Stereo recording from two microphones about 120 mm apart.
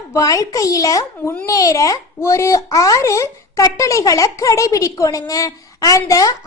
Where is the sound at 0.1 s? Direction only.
30° left (ahead or behind).